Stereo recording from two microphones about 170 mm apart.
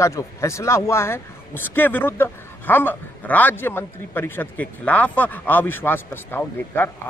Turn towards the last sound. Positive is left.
turn(degrees=10)  # may be behind; listen again after turning